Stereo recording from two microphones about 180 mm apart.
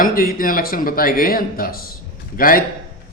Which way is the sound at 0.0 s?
55° left (ahead or behind).